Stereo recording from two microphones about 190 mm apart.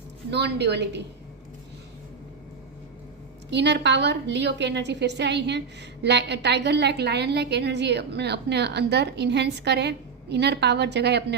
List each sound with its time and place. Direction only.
0.3 s a woman's voice: 65° right (ahead or behind)
3.5 s a woman's voice: 65° right (ahead or behind)